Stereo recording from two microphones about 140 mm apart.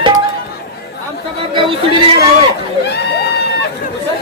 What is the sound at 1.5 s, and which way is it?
Chatter, 35° right (ahead or behind).